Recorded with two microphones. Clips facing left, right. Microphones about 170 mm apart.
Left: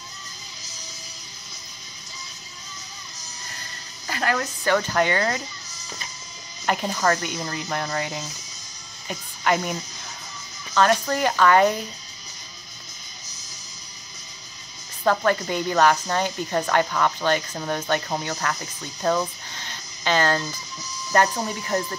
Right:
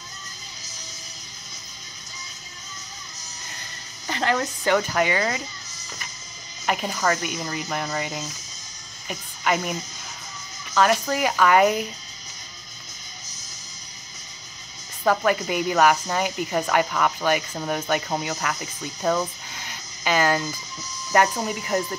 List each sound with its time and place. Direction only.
4.1 s speech: 20° right (ahead or behind); by 5.4 s 5° right (ahead or behind)
6.6 s a woman's voice: 5° right (ahead or behind)
15.0 s speech: 5° right (ahead or behind)